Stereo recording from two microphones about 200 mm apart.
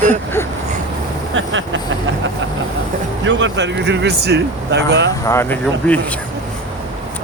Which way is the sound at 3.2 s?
65° right (ahead or behind).